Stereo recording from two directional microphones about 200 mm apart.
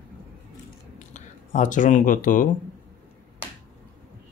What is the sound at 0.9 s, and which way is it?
Speech, 35° left (ahead or behind).